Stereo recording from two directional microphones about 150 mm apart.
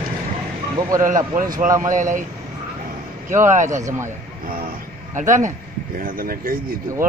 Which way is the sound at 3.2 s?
55° right (ahead or behind).